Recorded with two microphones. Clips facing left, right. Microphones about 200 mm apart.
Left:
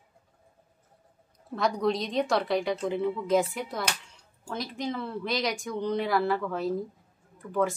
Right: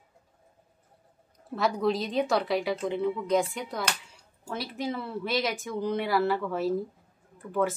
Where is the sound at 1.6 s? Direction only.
5° right (ahead or behind).